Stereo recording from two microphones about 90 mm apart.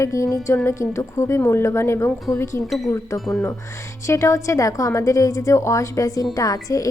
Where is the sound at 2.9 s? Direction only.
35° left (ahead or behind).